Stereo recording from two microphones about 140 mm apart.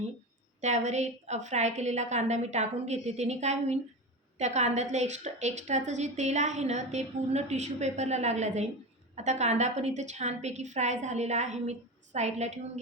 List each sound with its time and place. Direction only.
0.6 s a woman's voice: 55° right (ahead or behind)